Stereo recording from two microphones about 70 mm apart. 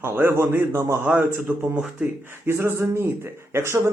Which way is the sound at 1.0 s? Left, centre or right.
Right.